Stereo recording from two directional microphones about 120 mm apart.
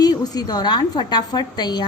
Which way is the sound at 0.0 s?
35° left (ahead or behind).